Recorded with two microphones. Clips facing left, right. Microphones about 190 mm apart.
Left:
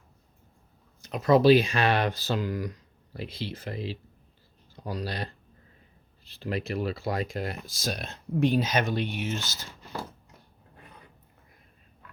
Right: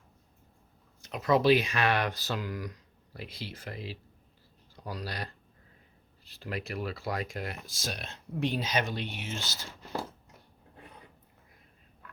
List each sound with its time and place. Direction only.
1.0 s speech: 35° left (ahead or behind)